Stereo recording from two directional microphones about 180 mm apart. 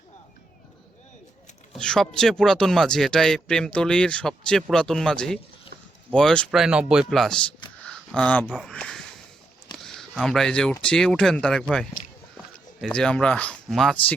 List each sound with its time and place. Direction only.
1.7 s speech: 5° left (ahead or behind)
7.9 s a sound: 5° left (ahead or behind)
8.5 s speech: 5° left (ahead or behind)
12.9 s speech: 5° left (ahead or behind)